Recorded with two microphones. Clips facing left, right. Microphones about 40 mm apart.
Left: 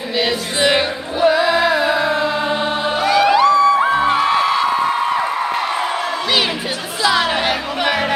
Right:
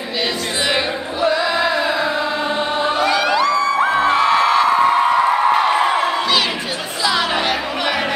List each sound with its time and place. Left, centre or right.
0.2 s music: centre
3.3 s music: centre
3.9 s music: centre
5.7 s a sound: right
7.0 s music: centre